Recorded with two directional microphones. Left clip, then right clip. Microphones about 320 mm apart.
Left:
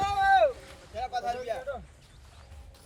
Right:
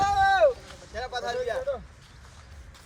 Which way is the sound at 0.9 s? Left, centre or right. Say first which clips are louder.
Right 1 dB; centre.